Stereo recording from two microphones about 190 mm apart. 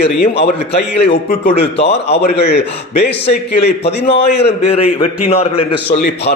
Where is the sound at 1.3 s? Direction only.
35° left (ahead or behind).